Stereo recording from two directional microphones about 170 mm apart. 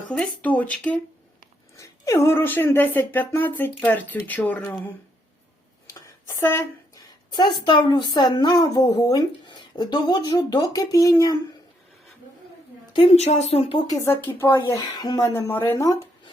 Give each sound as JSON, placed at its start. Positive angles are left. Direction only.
{"t": 0.1, "sound": "speech", "side_deg": 5}
{"t": 1.7, "sound": "speech", "side_deg": 20}
{"t": 6.4, "sound": "a sound", "side_deg": 15}
{"t": 7.3, "sound": "a woman's voice", "side_deg": 25}
{"t": 12.9, "sound": "a woman's voice", "side_deg": 35}
{"t": 14.0, "sound": "speech", "side_deg": 15}